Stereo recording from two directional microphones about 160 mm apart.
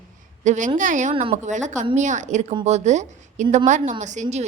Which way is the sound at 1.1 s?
35° right (ahead or behind).